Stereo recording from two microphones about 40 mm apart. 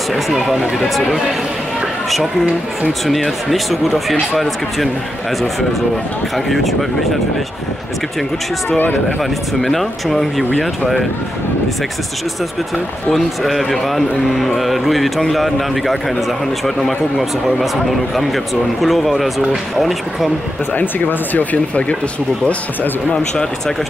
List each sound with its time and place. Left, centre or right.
0.1 s a man's voice: centre
3.3 s a man's voice: centre
6.3 s a man's voice: centre
8.6 s speech: left
9.2 s a man's voice: centre
13.1 s a man's voice: centre
20.7 s speech: left